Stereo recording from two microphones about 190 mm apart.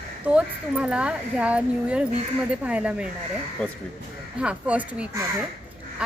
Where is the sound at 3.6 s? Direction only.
5° left (ahead or behind).